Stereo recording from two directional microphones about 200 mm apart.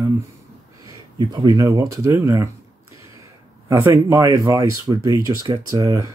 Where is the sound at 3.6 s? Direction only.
15° right (ahead or behind).